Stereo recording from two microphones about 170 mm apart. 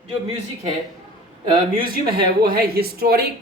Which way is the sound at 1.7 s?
55° right (ahead or behind).